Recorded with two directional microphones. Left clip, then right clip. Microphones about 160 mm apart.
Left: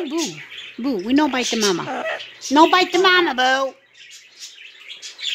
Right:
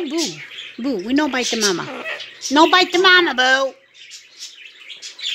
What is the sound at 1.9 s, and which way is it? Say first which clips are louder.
Speech: left 3 dB; 35° left (ahead or behind).